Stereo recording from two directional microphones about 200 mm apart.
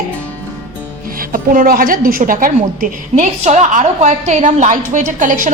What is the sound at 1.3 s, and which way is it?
A woman's voice, 45° right (ahead or behind).